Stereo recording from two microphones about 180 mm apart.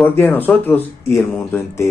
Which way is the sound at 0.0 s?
10° left (ahead or behind).